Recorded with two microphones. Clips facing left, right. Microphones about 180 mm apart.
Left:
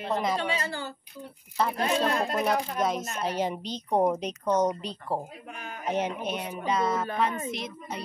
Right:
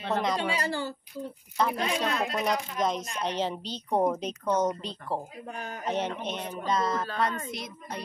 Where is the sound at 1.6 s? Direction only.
5° left (ahead or behind).